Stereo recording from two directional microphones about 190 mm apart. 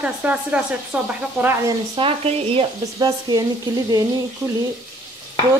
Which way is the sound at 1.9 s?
30° right (ahead or behind).